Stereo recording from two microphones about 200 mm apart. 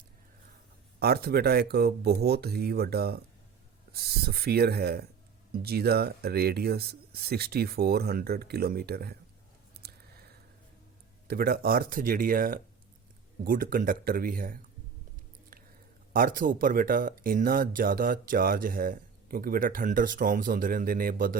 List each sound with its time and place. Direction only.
0.9 s speech: 50° right (ahead or behind)
9.8 s a sound: 50° right (ahead or behind)
11.3 s speech: 50° right (ahead or behind)
16.1 s speech: 45° right (ahead or behind)